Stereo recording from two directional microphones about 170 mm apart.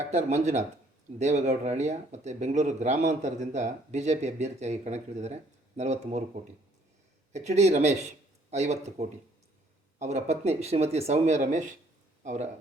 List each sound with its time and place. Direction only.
0.3 s speech: 40° right (ahead or behind)
7.3 s speech: 40° right (ahead or behind)